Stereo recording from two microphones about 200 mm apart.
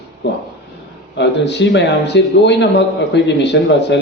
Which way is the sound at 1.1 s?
60° left (ahead or behind).